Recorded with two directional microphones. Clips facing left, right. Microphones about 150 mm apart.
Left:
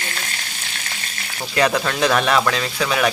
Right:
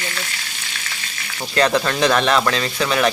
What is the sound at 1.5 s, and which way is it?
Speech, 5° left (ahead or behind).